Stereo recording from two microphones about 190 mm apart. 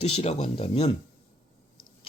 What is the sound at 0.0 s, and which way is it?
Speech, 35° left (ahead or behind).